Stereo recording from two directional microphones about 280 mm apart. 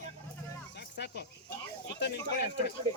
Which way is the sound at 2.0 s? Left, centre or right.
Left.